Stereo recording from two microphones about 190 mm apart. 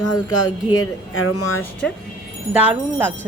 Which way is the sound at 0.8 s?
90° left.